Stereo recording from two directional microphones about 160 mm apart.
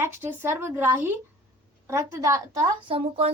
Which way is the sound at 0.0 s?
15° right (ahead or behind).